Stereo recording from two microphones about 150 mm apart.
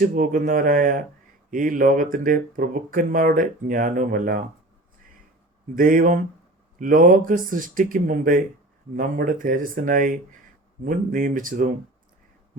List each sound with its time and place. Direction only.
0.0 s speech: 65° right (ahead or behind)
5.7 s speech: 65° right (ahead or behind)